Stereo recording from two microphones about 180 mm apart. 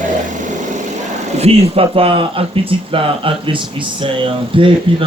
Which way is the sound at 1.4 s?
35° right (ahead or behind).